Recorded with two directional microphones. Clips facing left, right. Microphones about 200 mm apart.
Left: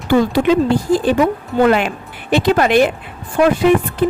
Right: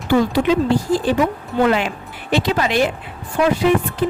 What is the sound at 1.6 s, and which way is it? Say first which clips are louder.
Speech: left 3 dB; 55° left (ahead or behind).